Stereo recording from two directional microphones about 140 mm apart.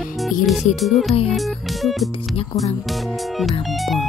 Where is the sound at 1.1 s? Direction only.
45° left (ahead or behind).